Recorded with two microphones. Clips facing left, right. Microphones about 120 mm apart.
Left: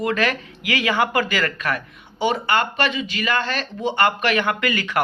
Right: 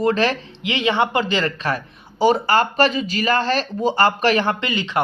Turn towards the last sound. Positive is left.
turn(degrees=-25)  # may be behind; listen again after turning